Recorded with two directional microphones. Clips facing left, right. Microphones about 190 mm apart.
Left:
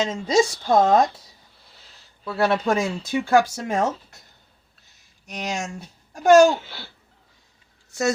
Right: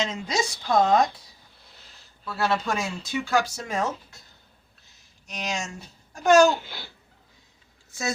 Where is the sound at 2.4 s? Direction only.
60° left (ahead or behind).